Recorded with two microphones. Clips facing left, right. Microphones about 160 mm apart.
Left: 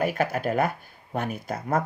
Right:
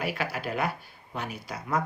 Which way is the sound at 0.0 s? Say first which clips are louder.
Left 6 dB; 45° left (ahead or behind).